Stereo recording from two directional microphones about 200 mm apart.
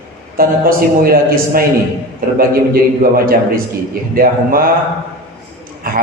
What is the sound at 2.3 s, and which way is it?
A man's voice, 45° right (ahead or behind).